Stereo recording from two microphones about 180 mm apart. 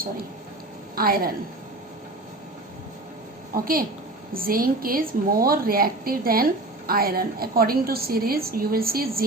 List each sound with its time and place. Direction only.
0.9 s a woman's voice: 55° right (ahead or behind)
3.5 s a woman's voice: 55° right (ahead or behind)